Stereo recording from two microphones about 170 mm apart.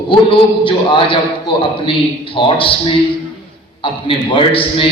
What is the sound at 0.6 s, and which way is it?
A man's voice, 30° left (ahead or behind).